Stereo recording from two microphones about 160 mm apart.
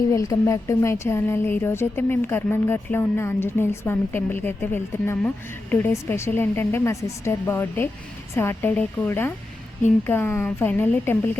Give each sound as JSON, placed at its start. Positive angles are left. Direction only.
{"t": 0.1, "sound": "speech", "side_deg": 20}